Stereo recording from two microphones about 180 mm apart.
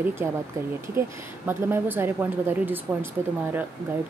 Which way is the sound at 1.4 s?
10° right (ahead or behind).